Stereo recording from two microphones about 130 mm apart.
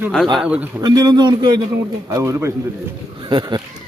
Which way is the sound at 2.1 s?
20° right (ahead or behind).